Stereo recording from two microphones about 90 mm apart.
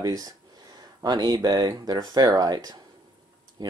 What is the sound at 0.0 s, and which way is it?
Speech, 45° right (ahead or behind).